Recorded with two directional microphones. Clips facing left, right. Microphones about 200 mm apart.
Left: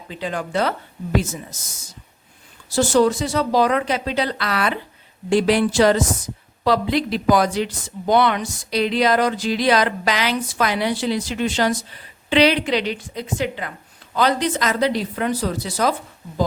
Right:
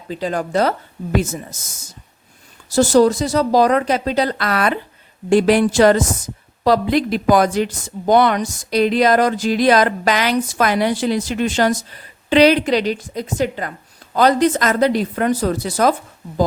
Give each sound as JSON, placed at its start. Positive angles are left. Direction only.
{"t": 0.1, "sound": "a woman's voice", "side_deg": -40}
{"t": 2.7, "sound": "a woman's voice", "side_deg": -40}